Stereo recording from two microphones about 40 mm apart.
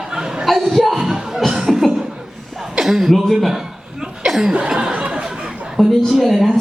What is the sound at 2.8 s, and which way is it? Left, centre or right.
Speech, centre.